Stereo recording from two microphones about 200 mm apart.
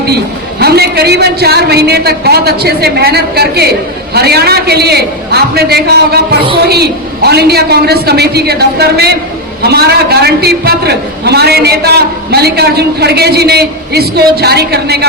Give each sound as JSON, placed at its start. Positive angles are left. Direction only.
{"t": 0.6, "sound": "a woman's voice", "side_deg": -50}